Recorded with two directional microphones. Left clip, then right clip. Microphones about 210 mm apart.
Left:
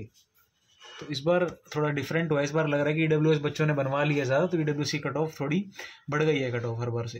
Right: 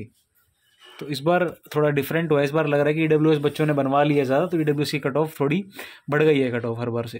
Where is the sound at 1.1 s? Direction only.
55° right (ahead or behind).